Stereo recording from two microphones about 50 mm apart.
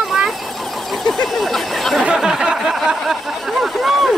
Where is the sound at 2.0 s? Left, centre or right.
Centre.